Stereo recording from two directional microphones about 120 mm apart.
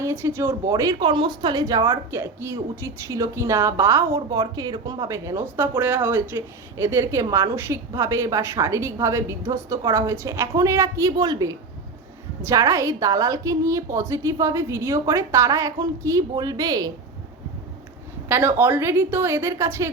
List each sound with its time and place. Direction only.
0.0 s speech: 20° right (ahead or behind)
0.7 s speech: 30° right (ahead or behind)
1.0 s speech: 40° right (ahead or behind); by 4.2 s 25° right (ahead or behind)
4.3 s speech: 35° right (ahead or behind)
18.3 s speech: 20° right (ahead or behind)